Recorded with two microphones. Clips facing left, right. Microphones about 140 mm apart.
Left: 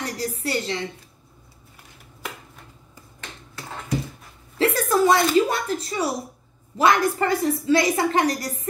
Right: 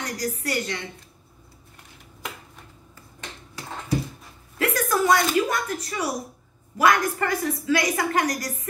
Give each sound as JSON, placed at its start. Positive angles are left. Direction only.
{"t": 0.0, "sound": "a woman's voice", "side_deg": 30}
{"t": 4.6, "sound": "a sound", "side_deg": 30}
{"t": 6.8, "sound": "a woman's voice", "side_deg": 25}